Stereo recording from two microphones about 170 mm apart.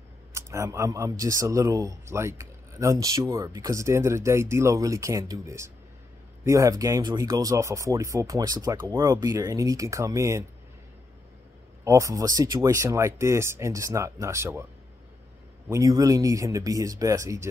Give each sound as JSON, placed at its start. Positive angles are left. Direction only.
{"t": 0.3, "sound": "speech", "side_deg": -15}
{"t": 11.8, "sound": "speech", "side_deg": -20}
{"t": 15.7, "sound": "speech", "side_deg": -20}